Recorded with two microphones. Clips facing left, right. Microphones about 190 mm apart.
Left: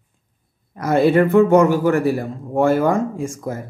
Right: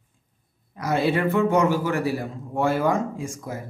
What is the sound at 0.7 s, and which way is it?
Speech, 50° left (ahead or behind).